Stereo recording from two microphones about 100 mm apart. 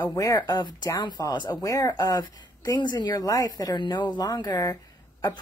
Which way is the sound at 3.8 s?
55° left (ahead or behind).